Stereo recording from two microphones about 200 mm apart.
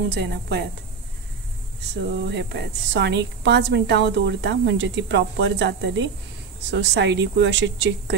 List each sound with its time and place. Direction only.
0.1 s a woman's voice: 55° right (ahead or behind)
2.2 s a woman's voice: 60° right (ahead or behind)